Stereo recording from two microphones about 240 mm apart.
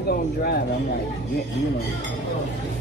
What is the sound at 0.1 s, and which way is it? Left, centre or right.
Speech, left.